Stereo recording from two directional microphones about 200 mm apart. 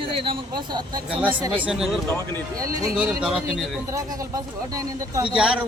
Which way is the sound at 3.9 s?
20° right (ahead or behind).